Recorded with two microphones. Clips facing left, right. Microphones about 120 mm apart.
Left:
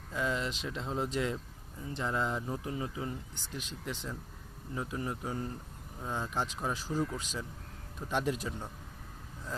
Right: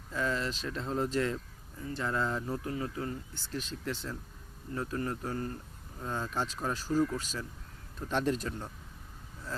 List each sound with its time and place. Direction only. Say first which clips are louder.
0.1 s speech: right 1 dB; 15° left (ahead or behind)